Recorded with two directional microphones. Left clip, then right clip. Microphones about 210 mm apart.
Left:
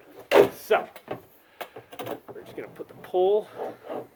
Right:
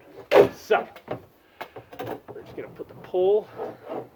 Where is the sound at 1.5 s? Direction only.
20° left (ahead or behind).